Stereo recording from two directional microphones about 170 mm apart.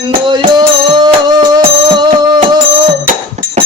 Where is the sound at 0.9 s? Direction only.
25° right (ahead or behind).